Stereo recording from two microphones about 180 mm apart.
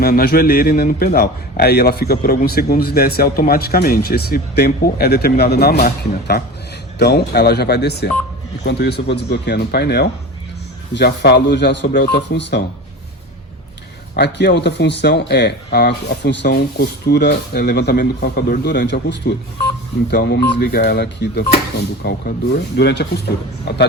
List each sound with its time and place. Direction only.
0.0 s a man's voice: 60° left (ahead or behind)
14.2 s speech: 70° left (ahead or behind)
22.0 s speech: 50° left (ahead or behind)
22.8 s speech: 65° left (ahead or behind)